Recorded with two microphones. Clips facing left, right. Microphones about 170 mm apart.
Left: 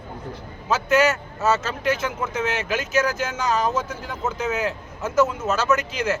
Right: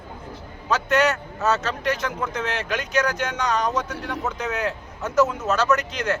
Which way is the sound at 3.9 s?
70° right (ahead or behind).